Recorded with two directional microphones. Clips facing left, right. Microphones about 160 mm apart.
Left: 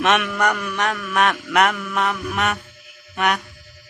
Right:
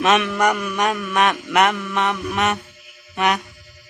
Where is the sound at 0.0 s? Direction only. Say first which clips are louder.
Right 2 dB; centre (ahead or behind).